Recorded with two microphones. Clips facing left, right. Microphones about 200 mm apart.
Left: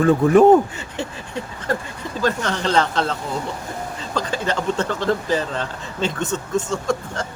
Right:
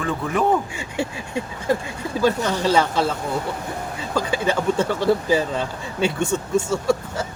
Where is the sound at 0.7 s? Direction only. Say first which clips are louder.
Right 3 dB; 10° right (ahead or behind).